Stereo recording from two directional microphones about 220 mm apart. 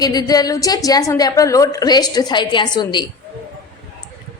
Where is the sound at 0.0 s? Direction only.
15° left (ahead or behind).